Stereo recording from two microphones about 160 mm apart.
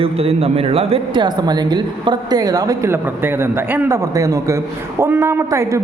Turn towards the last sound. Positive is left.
turn(degrees=-15)  # may be behind; listen again after turning